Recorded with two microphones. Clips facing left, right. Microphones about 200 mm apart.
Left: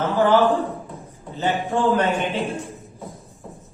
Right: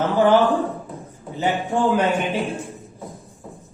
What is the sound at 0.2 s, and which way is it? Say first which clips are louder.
Speech: right 1 dB; 15° right (ahead or behind).